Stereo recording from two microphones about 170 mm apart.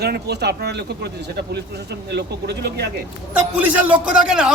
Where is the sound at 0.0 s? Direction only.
75° right (ahead or behind).